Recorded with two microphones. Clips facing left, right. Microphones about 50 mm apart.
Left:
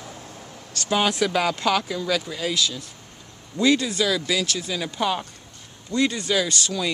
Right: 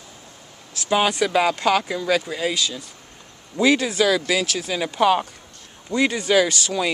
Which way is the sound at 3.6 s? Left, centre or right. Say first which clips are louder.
Right 2 dB; right.